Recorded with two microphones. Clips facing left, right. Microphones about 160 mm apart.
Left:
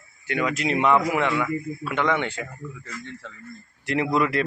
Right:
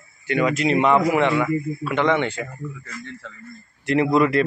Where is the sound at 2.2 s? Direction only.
5° left (ahead or behind).